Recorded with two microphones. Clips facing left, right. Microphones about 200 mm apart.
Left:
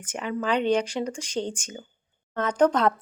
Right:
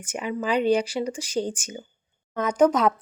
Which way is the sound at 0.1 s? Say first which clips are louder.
Right 1 dB; 10° right (ahead or behind).